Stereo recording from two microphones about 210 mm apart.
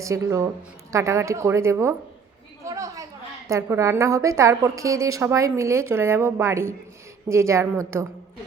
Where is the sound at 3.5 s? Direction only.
15° right (ahead or behind).